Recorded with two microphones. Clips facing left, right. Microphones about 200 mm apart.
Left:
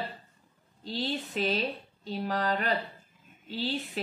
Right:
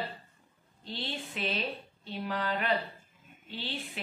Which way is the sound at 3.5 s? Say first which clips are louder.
Left 7 dB; 40° left (ahead or behind).